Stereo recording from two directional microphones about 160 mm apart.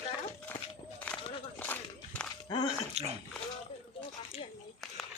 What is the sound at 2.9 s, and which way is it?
Dog, 40° right (ahead or behind).